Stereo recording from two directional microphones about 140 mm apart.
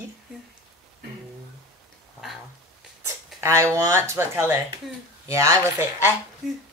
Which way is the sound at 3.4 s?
20° right (ahead or behind).